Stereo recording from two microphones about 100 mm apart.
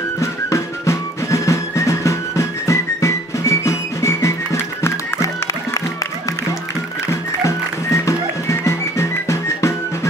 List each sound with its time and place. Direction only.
0.2 s music: 30° left (ahead or behind)
7.4 s music: 30° left (ahead or behind)